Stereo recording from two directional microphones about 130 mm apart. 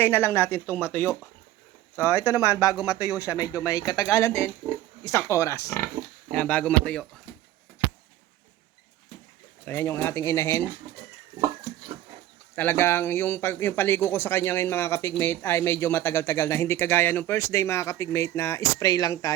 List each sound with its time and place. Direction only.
0.0 s a man's voice: 20° left (ahead or behind)
6.3 s a man's voice: 10° left (ahead or behind)
9.6 s speech: 15° left (ahead or behind)
12.5 s a man's voice: 15° left (ahead or behind)